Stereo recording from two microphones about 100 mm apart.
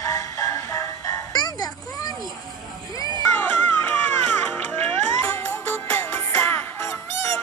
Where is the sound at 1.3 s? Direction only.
40° left (ahead or behind).